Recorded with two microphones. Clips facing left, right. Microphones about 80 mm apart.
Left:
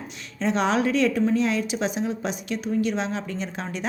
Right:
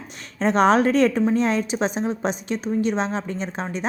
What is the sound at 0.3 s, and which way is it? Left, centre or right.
A woman's voice, right.